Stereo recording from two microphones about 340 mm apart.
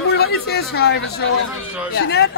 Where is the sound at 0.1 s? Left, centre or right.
Left.